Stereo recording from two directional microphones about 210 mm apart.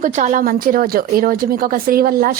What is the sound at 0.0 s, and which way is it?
A woman's voice, 35° right (ahead or behind).